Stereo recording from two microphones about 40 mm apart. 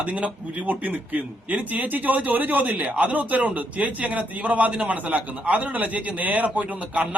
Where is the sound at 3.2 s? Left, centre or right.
Right.